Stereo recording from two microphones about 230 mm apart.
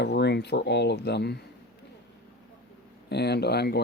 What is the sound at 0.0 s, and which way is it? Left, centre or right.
Speech, left.